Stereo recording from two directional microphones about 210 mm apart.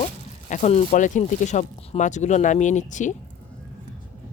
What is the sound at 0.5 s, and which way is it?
Speech, 35° left (ahead or behind).